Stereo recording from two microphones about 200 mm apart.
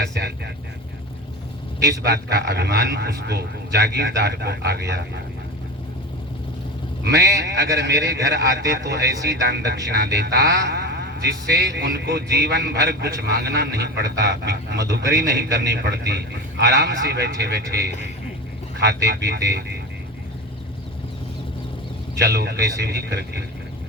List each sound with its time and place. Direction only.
0.0 s a man's voice: 55° right (ahead or behind)
2.0 s a man's voice: 55° right (ahead or behind)
7.0 s a man's voice: 55° right (ahead or behind)
22.2 s a man's voice: 55° right (ahead or behind)